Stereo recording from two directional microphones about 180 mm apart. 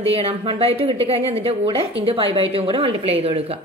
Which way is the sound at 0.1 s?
30° right (ahead or behind).